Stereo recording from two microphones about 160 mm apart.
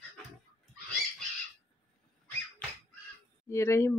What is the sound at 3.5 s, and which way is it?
Speech, 15° left (ahead or behind).